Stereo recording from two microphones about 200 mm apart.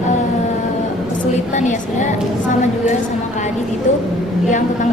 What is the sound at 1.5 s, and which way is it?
Speech, 35° left (ahead or behind).